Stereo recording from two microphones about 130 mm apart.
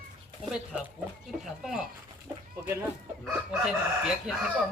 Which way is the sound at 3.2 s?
Centre (ahead or behind).